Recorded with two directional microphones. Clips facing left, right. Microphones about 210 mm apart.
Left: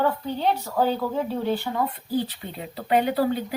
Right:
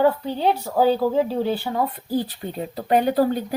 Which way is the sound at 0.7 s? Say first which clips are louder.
Right 5 dB; 35° right (ahead or behind).